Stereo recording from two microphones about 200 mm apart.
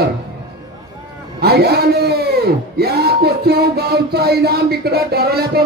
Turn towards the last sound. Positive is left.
turn(degrees=-50)  # may be behind; listen again after turning